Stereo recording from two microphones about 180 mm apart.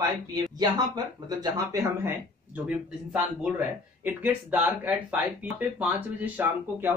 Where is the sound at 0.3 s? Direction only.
20° right (ahead or behind).